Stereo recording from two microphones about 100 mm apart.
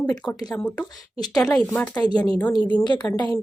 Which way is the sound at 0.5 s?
10° left (ahead or behind).